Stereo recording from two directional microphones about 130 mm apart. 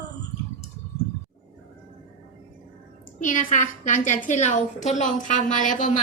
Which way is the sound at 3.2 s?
80° left.